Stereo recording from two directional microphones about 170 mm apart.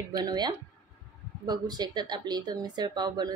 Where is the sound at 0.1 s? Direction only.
25° right (ahead or behind).